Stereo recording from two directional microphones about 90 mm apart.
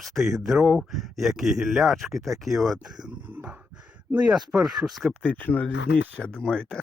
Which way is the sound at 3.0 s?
15° right (ahead or behind).